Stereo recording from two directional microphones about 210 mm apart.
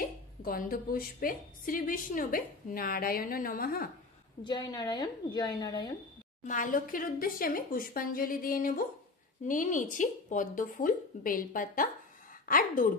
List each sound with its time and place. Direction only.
0.0 s a woman's voice: 40° left (ahead or behind)
4.4 s a woman's voice: 20° left (ahead or behind)
6.4 s a woman's voice: 40° left (ahead or behind)